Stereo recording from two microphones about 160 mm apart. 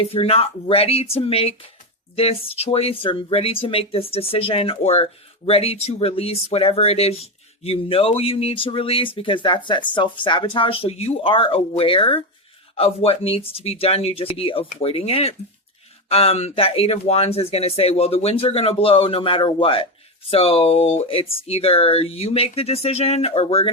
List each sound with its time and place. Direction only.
0.1 s speech: 35° left (ahead or behind)